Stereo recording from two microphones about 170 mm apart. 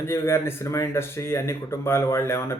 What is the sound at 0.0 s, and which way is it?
Speech, 15° left (ahead or behind).